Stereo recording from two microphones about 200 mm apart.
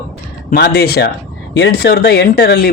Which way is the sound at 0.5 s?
50° left (ahead or behind).